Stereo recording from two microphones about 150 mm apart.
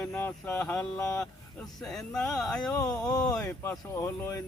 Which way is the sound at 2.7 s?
25° left (ahead or behind).